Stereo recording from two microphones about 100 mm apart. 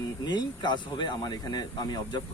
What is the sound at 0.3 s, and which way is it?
Speech, 50° left (ahead or behind).